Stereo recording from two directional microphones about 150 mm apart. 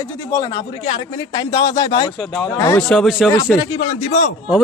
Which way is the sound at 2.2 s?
5° left (ahead or behind).